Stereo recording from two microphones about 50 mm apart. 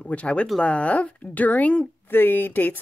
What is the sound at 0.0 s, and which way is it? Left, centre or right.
Speech, left.